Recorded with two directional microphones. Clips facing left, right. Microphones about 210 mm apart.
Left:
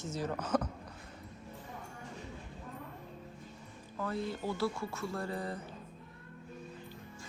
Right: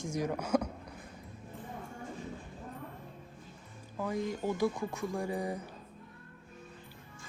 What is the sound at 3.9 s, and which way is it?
Speech, 15° right (ahead or behind).